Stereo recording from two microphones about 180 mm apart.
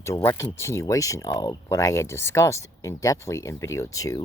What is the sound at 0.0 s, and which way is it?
Speech, 15° left (ahead or behind).